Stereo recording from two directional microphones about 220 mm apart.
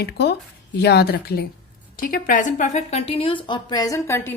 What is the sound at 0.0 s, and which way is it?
A woman's voice, 50° left (ahead or behind).